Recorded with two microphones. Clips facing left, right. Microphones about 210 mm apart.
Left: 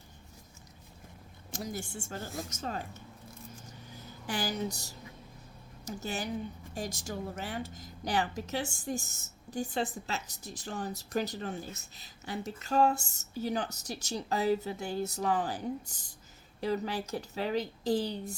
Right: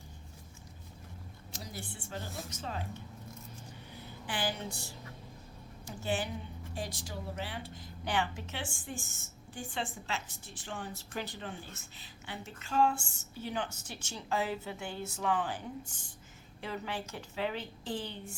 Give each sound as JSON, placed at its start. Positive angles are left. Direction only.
{"t": 1.5, "sound": "a woman's voice", "side_deg": 50}
{"t": 3.7, "sound": "a sound", "side_deg": 40}
{"t": 5.8, "sound": "a woman's voice", "side_deg": 40}